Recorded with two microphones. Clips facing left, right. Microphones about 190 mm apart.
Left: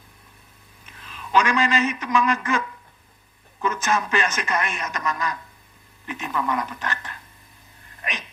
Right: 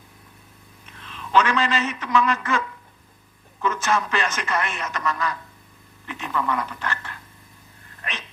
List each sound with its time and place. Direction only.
0.9 s a man's voice: 10° left (ahead or behind)
8.0 s dog: 15° left (ahead or behind)